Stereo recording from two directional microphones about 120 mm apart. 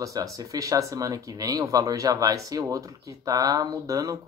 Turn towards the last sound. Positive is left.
turn(degrees=-30)  # may be behind; listen again after turning